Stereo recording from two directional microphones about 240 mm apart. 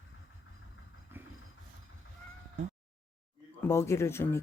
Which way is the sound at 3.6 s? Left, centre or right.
Centre.